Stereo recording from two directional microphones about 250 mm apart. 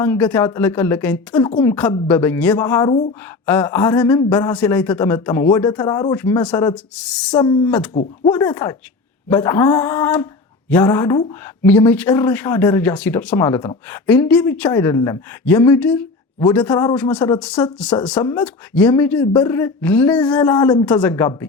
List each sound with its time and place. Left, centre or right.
0.0 s speech: centre
1.4 s speech: centre
1.7 s speech: centre
7.3 s speech: centre